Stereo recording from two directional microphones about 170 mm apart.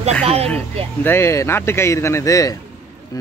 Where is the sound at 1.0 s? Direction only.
15° left (ahead or behind).